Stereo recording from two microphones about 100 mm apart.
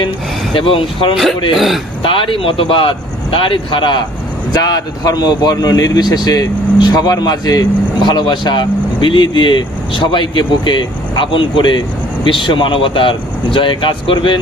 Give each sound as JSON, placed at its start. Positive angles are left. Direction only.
{"t": 0.5, "sound": "speech", "side_deg": 60}
{"t": 1.1, "sound": "speech", "side_deg": 0}
{"t": 2.0, "sound": "speech", "side_deg": 60}
{"t": 4.5, "sound": "a man's voice", "side_deg": 40}